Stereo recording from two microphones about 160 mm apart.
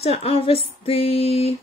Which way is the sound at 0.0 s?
40° left (ahead or behind).